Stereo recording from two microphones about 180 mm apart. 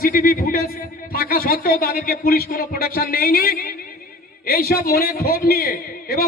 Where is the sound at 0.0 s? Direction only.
55° left (ahead or behind).